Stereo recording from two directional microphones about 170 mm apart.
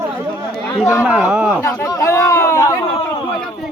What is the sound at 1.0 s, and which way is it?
Speech, 5° right (ahead or behind).